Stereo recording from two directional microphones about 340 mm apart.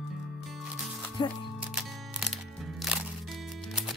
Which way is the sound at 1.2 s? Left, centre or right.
Centre.